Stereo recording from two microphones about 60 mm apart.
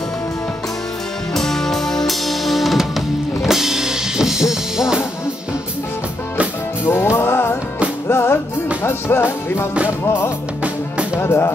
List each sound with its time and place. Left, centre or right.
1.3 s music: centre
6.9 s music: left
10.0 s speech: left